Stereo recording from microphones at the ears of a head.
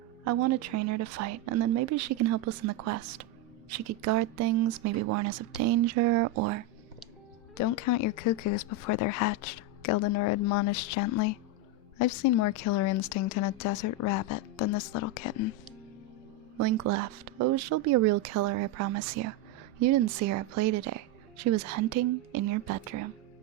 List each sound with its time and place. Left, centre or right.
0.3 s speech: right
7.5 s speech: left
16.6 s speech: right